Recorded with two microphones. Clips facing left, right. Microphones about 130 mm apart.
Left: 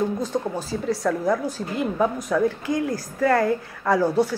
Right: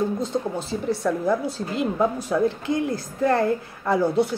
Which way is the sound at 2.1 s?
30° right (ahead or behind).